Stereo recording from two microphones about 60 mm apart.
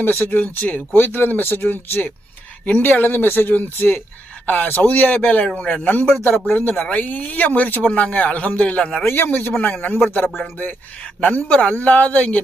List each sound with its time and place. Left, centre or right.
0.3 s speech: left
9.0 s speech: left
9.6 s speech: left